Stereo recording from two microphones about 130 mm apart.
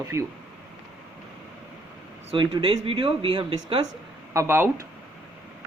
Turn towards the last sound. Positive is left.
turn(degrees=-20)  # may be behind; listen again after turning